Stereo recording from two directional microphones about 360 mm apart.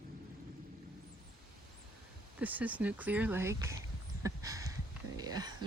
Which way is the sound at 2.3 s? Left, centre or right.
Centre.